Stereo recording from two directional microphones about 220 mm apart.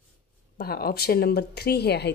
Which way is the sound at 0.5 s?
45° left (ahead or behind).